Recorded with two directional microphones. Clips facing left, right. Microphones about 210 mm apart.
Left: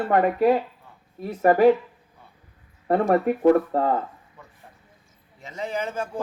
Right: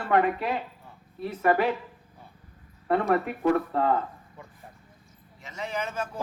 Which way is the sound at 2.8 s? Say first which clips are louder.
Left 5 dB; 40° left (ahead or behind).